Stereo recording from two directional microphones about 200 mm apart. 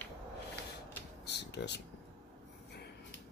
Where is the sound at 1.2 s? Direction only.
55° left (ahead or behind).